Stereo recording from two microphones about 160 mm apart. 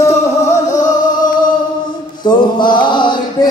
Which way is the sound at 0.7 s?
50° left (ahead or behind).